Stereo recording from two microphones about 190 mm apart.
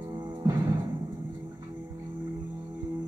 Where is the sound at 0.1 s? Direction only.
25° right (ahead or behind).